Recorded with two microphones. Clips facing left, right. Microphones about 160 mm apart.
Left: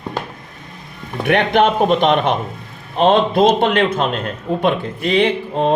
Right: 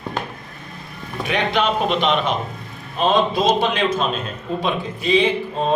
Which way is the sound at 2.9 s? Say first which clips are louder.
Left 4 dB; 60° left (ahead or behind).